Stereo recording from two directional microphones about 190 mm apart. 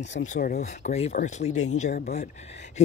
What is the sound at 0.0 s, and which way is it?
Speech, 65° left (ahead or behind).